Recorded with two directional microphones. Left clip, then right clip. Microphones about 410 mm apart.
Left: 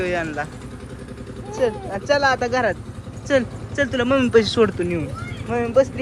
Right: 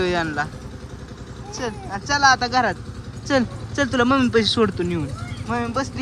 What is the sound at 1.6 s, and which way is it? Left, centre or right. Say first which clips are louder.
Speech: left 7 dB; centre.